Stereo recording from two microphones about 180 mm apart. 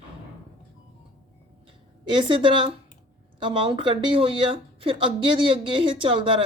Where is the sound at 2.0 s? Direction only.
25° right (ahead or behind).